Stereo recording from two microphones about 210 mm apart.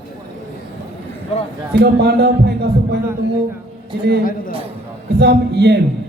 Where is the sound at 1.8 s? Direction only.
50° right (ahead or behind).